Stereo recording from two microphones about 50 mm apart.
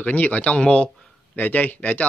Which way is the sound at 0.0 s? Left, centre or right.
Left.